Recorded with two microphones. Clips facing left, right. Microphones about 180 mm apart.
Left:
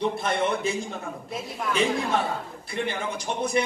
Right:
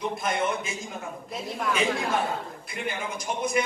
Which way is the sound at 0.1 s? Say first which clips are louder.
Left 2 dB; 30° left (ahead or behind).